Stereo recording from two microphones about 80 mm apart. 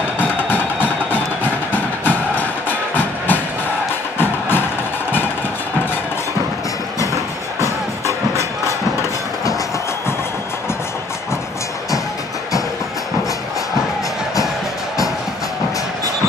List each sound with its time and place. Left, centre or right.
0.2 s music: left